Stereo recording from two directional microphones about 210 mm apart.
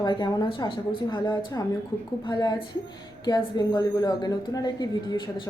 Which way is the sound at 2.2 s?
20° left (ahead or behind).